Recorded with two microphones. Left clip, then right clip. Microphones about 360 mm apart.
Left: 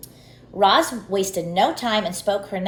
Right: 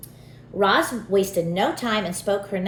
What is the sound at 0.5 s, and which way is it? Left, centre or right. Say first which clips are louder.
A woman's voice: left 3 dB; centre.